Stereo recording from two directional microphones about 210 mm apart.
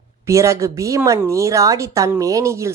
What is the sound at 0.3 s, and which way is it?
Speech, 15° right (ahead or behind).